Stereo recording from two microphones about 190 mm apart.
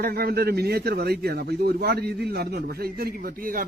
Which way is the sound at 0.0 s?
50° right (ahead or behind).